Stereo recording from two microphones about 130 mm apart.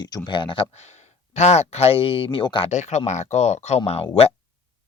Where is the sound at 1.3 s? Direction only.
60° left (ahead or behind); by 2.6 s 40° left (ahead or behind).